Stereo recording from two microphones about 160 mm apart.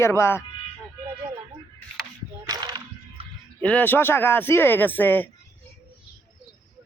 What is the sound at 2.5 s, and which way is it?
Music, 25° right (ahead or behind).